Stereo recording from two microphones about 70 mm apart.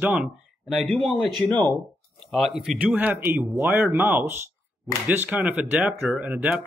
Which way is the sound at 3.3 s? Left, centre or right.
Right.